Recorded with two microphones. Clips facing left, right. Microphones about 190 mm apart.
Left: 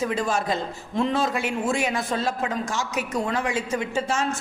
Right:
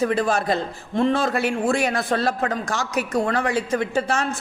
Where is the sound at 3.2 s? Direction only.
60° right (ahead or behind).